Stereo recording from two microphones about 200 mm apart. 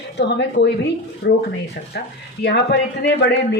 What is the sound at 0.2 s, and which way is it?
A man's voice, 60° left (ahead or behind).